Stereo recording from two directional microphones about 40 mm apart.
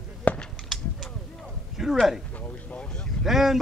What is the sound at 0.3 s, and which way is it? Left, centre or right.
Cap gun, left.